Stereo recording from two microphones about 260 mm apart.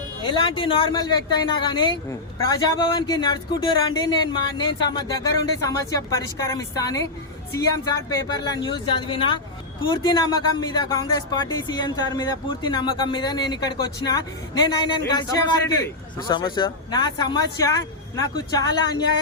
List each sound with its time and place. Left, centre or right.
0.3 s speech: centre